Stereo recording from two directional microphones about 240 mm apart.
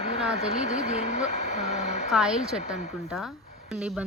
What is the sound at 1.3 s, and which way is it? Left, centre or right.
Speech, left.